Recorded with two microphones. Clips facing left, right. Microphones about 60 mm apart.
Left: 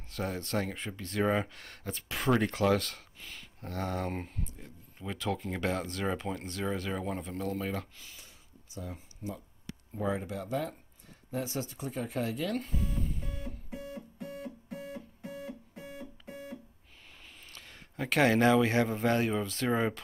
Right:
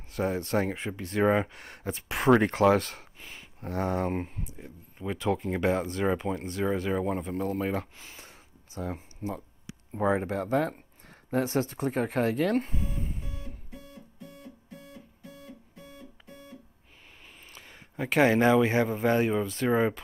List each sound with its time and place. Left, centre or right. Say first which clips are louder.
0.1 s speech: right 6 dB; centre; by 2.8 s right
3.2 s speech: right 2 dB; centre
8.0 s a sound: right 4 dB; right
8.7 s speech: right 7 dB; right
12.6 s speech: even; right
13.2 s music: left 1 dB; centre
13.7 s music: left 5 dB; left
17.5 s speech: right 2 dB; centre